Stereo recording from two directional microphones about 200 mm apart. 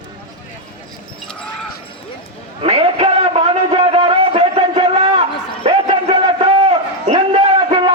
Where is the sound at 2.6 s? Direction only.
30° right (ahead or behind).